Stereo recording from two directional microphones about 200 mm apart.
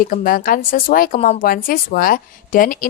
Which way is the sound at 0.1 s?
45° left (ahead or behind).